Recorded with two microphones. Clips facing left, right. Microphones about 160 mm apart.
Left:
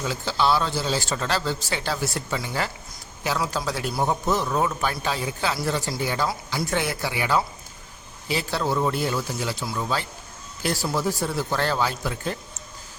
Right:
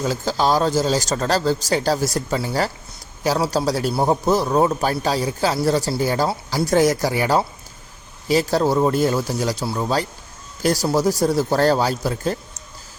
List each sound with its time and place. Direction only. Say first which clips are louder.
0.0 s a man's voice: right 4 dB; 40° right (ahead or behind)